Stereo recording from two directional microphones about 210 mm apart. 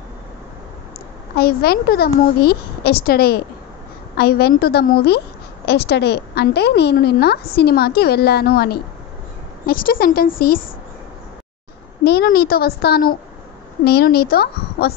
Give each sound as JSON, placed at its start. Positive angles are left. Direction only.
{"t": 1.3, "sound": "a woman's voice", "side_deg": 45}
{"t": 12.0, "sound": "a woman's voice", "side_deg": 50}